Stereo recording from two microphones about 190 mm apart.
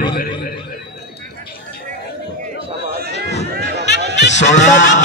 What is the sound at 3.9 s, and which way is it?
Music, 65° left (ahead or behind).